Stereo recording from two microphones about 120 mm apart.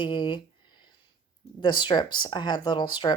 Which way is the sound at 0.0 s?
40° left (ahead or behind).